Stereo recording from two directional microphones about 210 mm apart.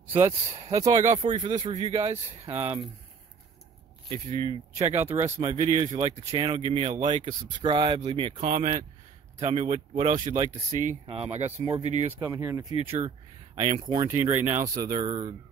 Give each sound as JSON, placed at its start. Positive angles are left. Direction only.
{"t": 0.0, "sound": "a sound", "side_deg": -10}
{"t": 0.7, "sound": "speech", "side_deg": -15}
{"t": 0.9, "sound": "speech", "side_deg": -35}
{"t": 2.4, "sound": "speech", "side_deg": -10}
{"t": 4.5, "sound": "speech", "side_deg": -15}
{"t": 4.9, "sound": "speech", "side_deg": -30}
{"t": 6.0, "sound": "speech", "side_deg": -20}
{"t": 8.5, "sound": "speech", "side_deg": -40}
{"t": 12.2, "sound": "speech", "side_deg": -15}
{"t": 13.6, "sound": "speech", "side_deg": -35}
{"t": 13.8, "sound": "speech", "side_deg": -15}